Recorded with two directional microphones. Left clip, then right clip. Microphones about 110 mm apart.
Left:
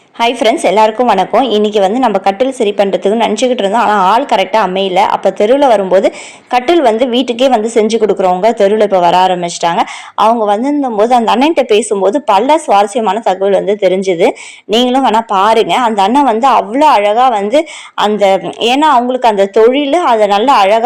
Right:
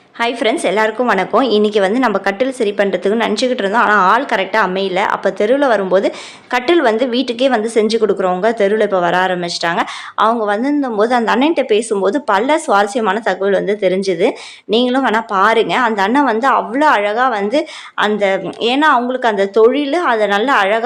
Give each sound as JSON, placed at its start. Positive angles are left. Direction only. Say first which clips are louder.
{"t": 0.2, "sound": "speech", "louder": "left 5 dB", "side_deg": 25}
{"t": 1.4, "sound": "a woman's voice", "louder": "left 3 dB", "side_deg": 0}